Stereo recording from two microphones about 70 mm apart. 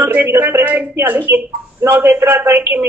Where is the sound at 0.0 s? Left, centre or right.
Right.